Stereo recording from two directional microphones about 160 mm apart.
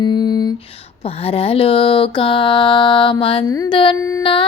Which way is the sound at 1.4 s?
35° left (ahead or behind).